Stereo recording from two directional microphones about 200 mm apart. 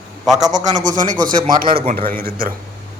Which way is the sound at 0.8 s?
40° right (ahead or behind).